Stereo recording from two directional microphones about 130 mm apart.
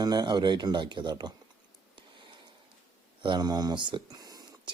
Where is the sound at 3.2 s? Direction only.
35° right (ahead or behind).